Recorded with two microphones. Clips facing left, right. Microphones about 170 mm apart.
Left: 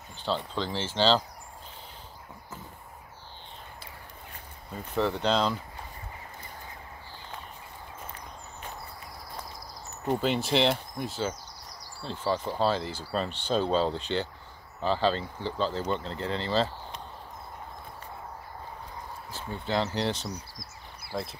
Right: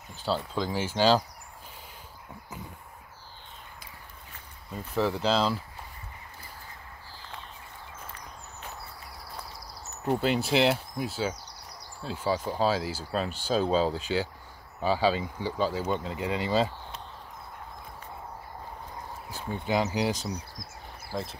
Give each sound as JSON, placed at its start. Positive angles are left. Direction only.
{"t": 0.2, "sound": "speech", "side_deg": -5}
{"t": 4.9, "sound": "speech", "side_deg": -5}
{"t": 10.0, "sound": "speech", "side_deg": -5}
{"t": 19.3, "sound": "speech", "side_deg": -10}
{"t": 20.3, "sound": "a sound", "side_deg": -50}
{"t": 21.1, "sound": "speech", "side_deg": 5}